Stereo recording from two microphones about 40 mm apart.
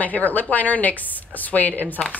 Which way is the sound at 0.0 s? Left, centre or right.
Left.